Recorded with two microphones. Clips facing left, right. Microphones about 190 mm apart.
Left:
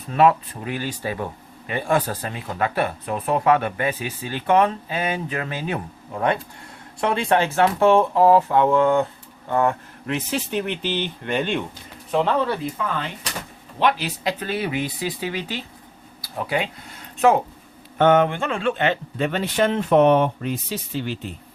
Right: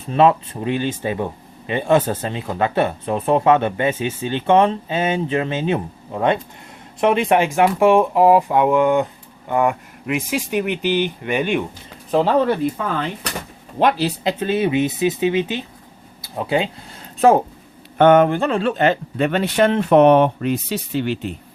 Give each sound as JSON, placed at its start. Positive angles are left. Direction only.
{"t": 0.1, "sound": "speech", "side_deg": -25}
{"t": 12.1, "sound": "a man's voice", "side_deg": -35}
{"t": 14.3, "sound": "speech", "side_deg": -25}
{"t": 17.2, "sound": "speech", "side_deg": -35}
{"t": 17.9, "sound": "speech", "side_deg": -60}
{"t": 19.1, "sound": "speech", "side_deg": -65}